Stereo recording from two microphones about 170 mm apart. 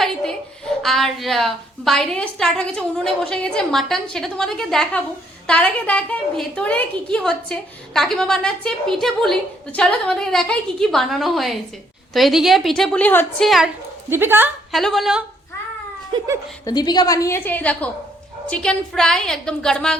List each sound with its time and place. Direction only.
0.0 s a sound: 5° left (ahead or behind)
0.8 s a woman's voice: centre (ahead or behind)
14.1 s a woman's voice: 10° right (ahead or behind)
14.7 s a woman's voice: centre (ahead or behind)
16.1 s speech: 20° right (ahead or behind)
16.6 s a woman's voice: 25° left (ahead or behind); by 20.0 s 5° left (ahead or behind)